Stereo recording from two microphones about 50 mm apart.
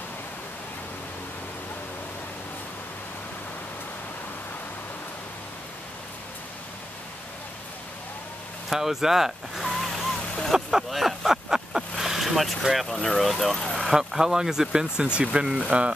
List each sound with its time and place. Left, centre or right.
8.6 s speech: centre
10.5 s a sound: centre
12.9 s speech: centre
13.8 s speech: centre
15.3 s speech: right